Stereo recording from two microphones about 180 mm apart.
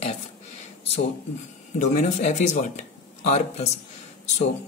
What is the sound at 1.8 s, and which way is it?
Speech, 40° left (ahead or behind).